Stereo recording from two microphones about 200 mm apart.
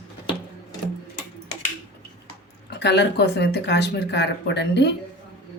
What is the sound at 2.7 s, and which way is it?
Speech, 60° left (ahead or behind).